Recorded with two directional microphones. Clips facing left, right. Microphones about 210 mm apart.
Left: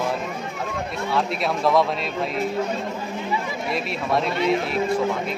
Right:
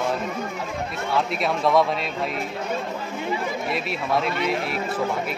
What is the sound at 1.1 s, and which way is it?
Speech, centre (ahead or behind).